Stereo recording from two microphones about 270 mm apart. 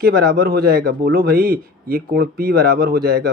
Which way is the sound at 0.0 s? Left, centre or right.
Right.